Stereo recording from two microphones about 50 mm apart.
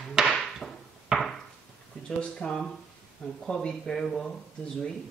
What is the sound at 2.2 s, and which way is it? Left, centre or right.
Speech, centre.